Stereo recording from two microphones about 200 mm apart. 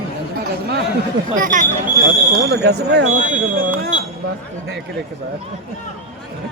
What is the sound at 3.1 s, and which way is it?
Speech, 45° right (ahead or behind).